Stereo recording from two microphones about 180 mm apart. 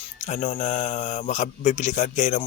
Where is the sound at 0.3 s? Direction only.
40° left (ahead or behind).